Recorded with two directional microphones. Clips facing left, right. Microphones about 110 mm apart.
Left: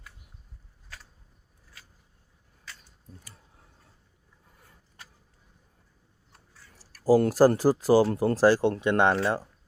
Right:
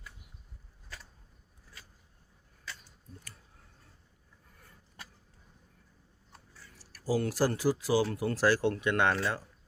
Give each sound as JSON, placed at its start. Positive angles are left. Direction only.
{"t": 6.7, "sound": "speech", "side_deg": 40}